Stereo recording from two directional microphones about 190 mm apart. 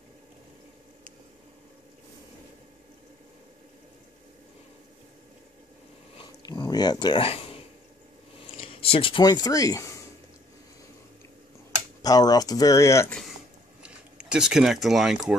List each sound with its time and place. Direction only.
6.1 s a sound: 25° left (ahead or behind)
8.8 s speech: 30° left (ahead or behind)
12.0 s speech: 20° left (ahead or behind)
13.8 s speech: 5° right (ahead or behind)